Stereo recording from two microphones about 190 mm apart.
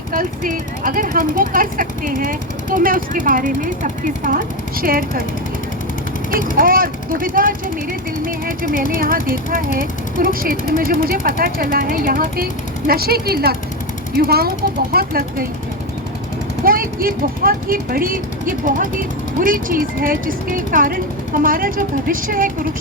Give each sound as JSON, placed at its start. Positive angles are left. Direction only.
{"t": 0.1, "sound": "speech", "side_deg": -45}
{"t": 6.6, "sound": "speech", "side_deg": -50}
{"t": 16.6, "sound": "speech", "side_deg": -50}